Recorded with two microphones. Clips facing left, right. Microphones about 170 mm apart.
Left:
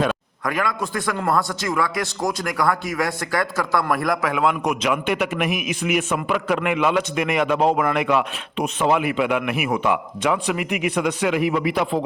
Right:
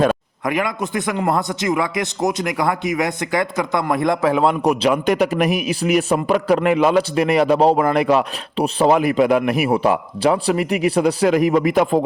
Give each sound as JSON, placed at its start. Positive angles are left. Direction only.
{"t": 0.4, "sound": "a man's voice", "side_deg": -20}